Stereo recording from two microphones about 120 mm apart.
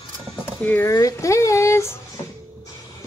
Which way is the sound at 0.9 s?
30° left (ahead or behind).